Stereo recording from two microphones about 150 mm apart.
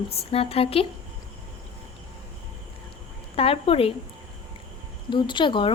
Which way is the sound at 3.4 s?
40° left (ahead or behind).